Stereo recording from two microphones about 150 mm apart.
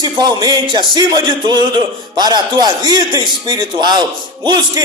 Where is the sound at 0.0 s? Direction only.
25° right (ahead or behind).